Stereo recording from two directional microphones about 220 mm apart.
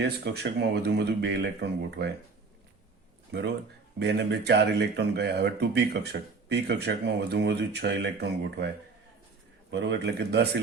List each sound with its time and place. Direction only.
0.0 s speech: 50° right (ahead or behind)
3.3 s speech: 50° right (ahead or behind)
9.6 s speech: 50° right (ahead or behind)